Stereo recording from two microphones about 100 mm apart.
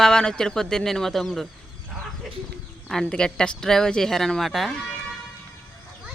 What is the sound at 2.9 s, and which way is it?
Speech, 5° left (ahead or behind).